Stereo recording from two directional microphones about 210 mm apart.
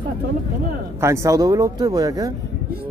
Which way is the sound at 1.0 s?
15° right (ahead or behind).